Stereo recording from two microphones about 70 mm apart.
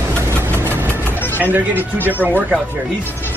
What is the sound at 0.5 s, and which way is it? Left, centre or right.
Vehicle, right.